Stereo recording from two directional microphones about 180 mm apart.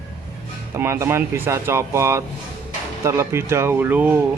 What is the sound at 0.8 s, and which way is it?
Speech, 15° right (ahead or behind).